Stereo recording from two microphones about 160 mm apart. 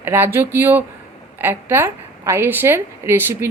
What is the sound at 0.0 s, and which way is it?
A woman's voice, 15° right (ahead or behind).